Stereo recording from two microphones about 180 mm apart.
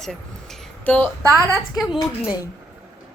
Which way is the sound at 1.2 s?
20° right (ahead or behind).